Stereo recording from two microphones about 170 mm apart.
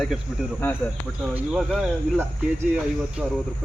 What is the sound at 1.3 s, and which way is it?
Speech, 5° right (ahead or behind).